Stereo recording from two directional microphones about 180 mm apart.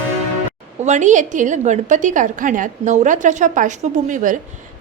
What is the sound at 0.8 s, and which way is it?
A woman's voice, 40° right (ahead or behind).